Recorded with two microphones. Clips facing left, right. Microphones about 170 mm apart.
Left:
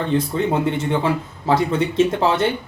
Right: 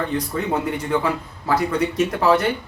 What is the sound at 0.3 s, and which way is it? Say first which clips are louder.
Speech: left 3 dB; 25° left (ahead or behind).